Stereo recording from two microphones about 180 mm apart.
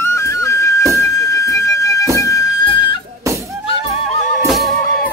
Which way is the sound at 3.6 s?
30° left (ahead or behind).